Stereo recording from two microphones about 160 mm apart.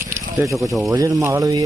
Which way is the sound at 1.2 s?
20° right (ahead or behind).